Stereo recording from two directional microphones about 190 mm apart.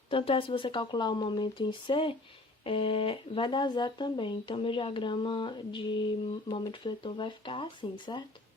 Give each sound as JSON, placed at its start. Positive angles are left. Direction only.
{"t": 0.1, "sound": "speech", "side_deg": 30}